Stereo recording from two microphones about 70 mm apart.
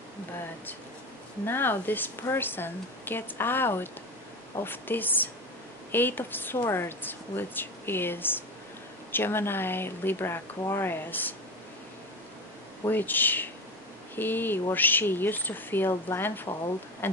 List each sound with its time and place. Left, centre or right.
1.4 s speech: left
12.8 s speech: left